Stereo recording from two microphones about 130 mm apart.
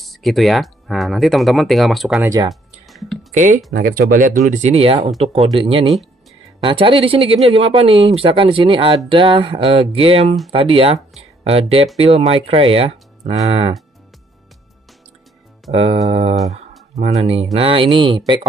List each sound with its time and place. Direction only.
0.0 s speech: centre (ahead or behind)
2.2 s speech: 25° right (ahead or behind)
2.9 s a sound: centre (ahead or behind)
3.3 s speech: 65° right (ahead or behind)
4.1 s speech: 90° right; by 12.9 s 45° right (ahead or behind)
13.2 s speech: 55° right (ahead or behind)
15.7 s speech: 50° right (ahead or behind)